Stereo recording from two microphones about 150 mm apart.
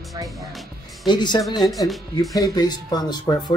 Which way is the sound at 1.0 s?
30° left (ahead or behind).